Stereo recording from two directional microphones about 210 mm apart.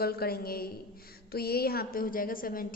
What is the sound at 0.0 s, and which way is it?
A woman's voice, 50° left (ahead or behind).